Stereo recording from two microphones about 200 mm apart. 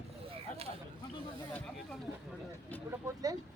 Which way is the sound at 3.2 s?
15° right (ahead or behind).